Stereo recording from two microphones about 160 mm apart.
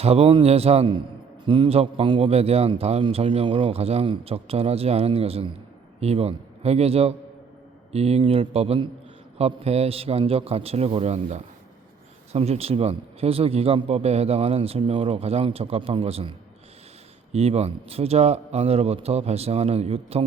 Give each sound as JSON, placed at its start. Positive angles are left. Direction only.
{"t": 0.0, "sound": "a man's voice", "side_deg": -40}
{"t": 17.3, "sound": "a man's voice", "side_deg": -40}